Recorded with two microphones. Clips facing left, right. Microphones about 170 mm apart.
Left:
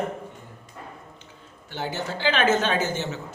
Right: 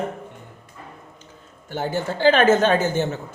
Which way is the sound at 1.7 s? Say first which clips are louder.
Right 5 dB; 50° right (ahead or behind).